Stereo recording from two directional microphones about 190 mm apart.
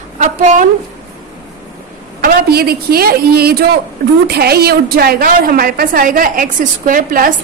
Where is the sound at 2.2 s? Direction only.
55° right (ahead or behind).